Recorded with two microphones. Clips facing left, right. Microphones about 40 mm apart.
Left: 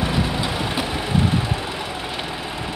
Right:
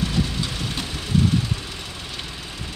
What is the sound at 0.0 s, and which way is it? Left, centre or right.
Vehicle, centre.